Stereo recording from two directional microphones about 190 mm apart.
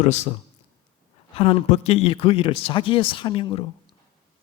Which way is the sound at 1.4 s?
30° left (ahead or behind).